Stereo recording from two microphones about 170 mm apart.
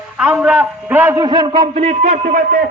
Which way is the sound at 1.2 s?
25° right (ahead or behind).